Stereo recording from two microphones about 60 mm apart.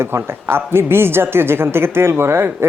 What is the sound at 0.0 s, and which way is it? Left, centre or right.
Speech, right.